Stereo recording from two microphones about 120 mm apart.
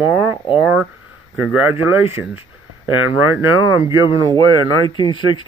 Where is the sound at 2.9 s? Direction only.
45° left (ahead or behind).